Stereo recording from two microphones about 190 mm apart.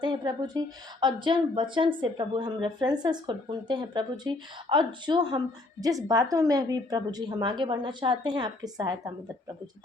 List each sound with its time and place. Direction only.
0.0 s speech: 25° right (ahead or behind)